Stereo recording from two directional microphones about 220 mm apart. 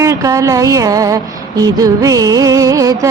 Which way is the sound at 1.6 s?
15° right (ahead or behind).